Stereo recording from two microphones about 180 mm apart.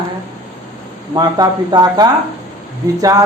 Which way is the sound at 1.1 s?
20° right (ahead or behind).